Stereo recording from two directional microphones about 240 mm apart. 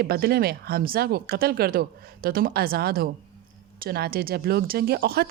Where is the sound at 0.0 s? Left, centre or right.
Right.